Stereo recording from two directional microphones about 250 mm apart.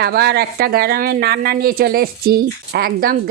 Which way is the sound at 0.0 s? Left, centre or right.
Right.